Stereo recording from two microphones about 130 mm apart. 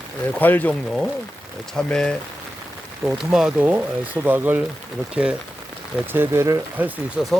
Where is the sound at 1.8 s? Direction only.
5° left (ahead or behind).